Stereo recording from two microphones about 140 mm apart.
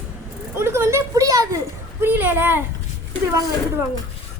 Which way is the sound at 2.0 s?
15° right (ahead or behind).